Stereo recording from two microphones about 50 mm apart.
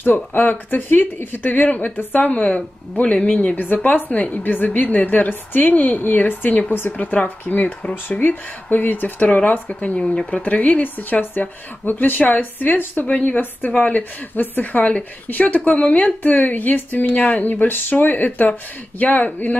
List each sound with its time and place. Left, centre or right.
0.0 s speech: left
3.0 s speech: left
3.5 s speech: left
16.2 s speech: left